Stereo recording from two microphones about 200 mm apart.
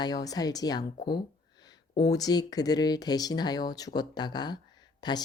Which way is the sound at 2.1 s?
20° left (ahead or behind).